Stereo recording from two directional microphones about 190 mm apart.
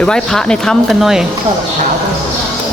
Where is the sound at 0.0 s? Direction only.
5° left (ahead or behind).